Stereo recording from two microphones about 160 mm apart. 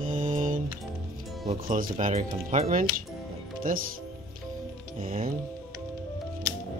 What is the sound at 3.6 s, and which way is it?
Speech, 60° right (ahead or behind).